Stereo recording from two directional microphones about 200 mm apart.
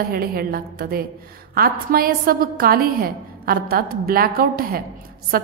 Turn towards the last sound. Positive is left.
turn(degrees=-45)  # may be behind; listen again after turning